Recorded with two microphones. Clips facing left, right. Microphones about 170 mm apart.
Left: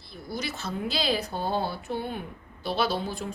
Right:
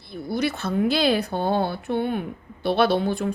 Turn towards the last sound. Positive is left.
turn(degrees=-60)  # may be behind; listen again after turning